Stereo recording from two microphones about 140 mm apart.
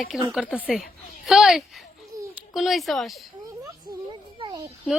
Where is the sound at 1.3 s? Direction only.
Centre (ahead or behind).